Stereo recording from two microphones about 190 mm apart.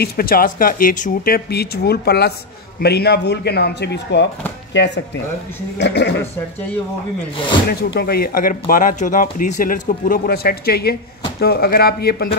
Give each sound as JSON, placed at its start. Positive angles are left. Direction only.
{"t": 0.0, "sound": "speech", "side_deg": 50}
{"t": 7.9, "sound": "speech", "side_deg": 55}